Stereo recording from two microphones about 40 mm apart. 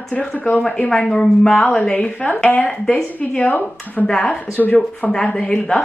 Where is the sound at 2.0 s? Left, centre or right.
Left.